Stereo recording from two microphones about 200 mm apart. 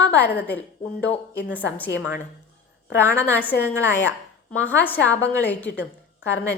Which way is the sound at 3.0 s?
10° left (ahead or behind).